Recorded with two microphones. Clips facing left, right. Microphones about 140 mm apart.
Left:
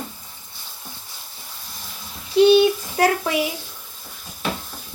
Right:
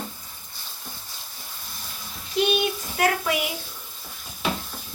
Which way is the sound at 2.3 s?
30° left (ahead or behind).